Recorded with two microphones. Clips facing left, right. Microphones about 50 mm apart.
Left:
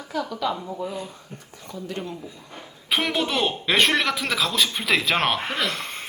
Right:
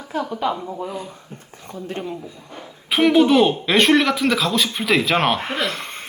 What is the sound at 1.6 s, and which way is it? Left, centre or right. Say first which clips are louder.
Speech: right 3 dB; right.